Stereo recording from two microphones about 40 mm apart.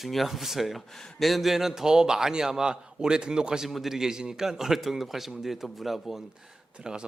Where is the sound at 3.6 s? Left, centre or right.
Centre.